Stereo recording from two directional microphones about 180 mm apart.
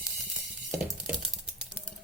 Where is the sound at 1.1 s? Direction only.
5° right (ahead or behind).